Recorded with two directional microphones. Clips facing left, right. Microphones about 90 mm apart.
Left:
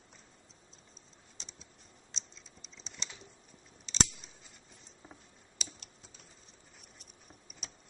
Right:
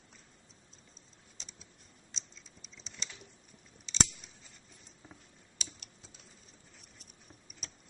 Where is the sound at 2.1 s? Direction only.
Centre (ahead or behind).